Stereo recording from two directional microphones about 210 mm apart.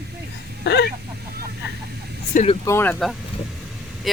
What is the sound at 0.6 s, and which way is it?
Speech, 55° left (ahead or behind).